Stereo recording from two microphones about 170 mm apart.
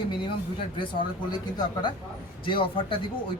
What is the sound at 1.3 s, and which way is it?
A man's voice, 25° left (ahead or behind).